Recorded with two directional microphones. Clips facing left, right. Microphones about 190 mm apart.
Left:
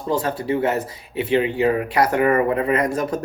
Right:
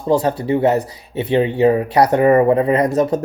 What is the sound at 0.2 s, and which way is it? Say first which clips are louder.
Speech: right 5 dB; 20° right (ahead or behind).